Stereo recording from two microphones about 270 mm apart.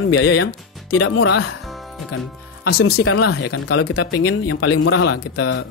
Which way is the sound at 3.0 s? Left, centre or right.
Left.